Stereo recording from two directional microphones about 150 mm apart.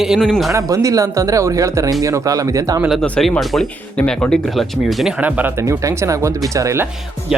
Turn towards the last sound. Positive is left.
turn(degrees=-20)  # may be behind; listen again after turning